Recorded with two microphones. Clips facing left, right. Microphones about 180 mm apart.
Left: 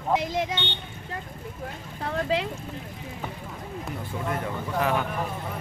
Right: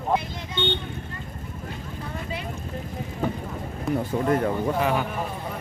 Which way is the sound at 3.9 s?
45° right (ahead or behind).